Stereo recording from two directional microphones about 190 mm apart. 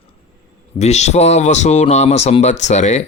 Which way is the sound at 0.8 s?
35° left (ahead or behind).